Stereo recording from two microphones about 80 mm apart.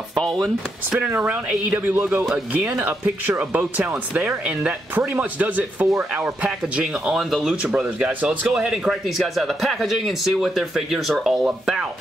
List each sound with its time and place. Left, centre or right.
0.1 s a man's voice: centre
0.9 s speech: right
8.5 s a man's voice: centre